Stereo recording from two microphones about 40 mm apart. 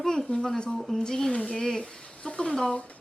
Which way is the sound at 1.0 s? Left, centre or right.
Centre.